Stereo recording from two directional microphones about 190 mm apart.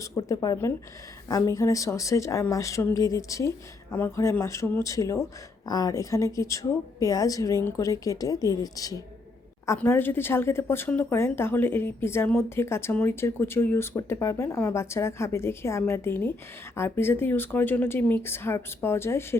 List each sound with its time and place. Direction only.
0.0 s speech: 20° left (ahead or behind)